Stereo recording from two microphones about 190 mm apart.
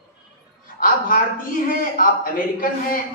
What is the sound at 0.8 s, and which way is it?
A woman's voice, 45° left (ahead or behind).